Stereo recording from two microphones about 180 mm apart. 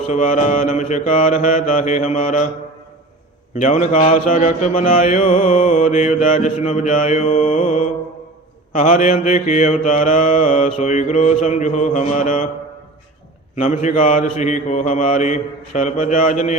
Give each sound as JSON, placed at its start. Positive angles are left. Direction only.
{"t": 0.1, "sound": "mantra", "side_deg": 45}
{"t": 3.5, "sound": "mantra", "side_deg": 40}
{"t": 13.6, "sound": "mantra", "side_deg": 45}